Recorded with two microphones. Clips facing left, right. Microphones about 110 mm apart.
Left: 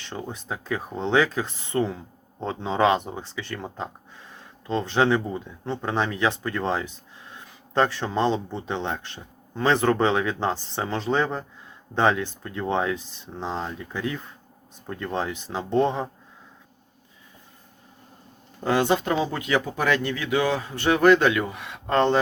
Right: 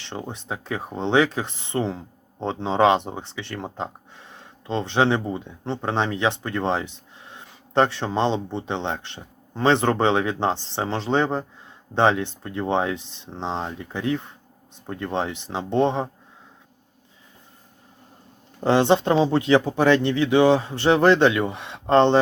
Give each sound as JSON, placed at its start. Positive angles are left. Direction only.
{"t": 0.0, "sound": "speech", "side_deg": -25}
{"t": 18.6, "sound": "speech", "side_deg": -25}